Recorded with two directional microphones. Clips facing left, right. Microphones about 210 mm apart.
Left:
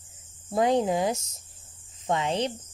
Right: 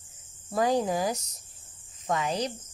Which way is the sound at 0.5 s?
25° left (ahead or behind).